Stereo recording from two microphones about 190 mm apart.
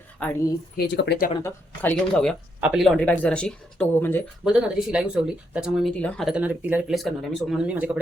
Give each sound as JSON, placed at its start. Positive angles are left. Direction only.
{"t": 0.2, "sound": "speech", "side_deg": 5}
{"t": 0.8, "sound": "speech", "side_deg": 60}
{"t": 1.4, "sound": "speech", "side_deg": 10}
{"t": 2.6, "sound": "speech", "side_deg": -5}
{"t": 4.4, "sound": "speech", "side_deg": -5}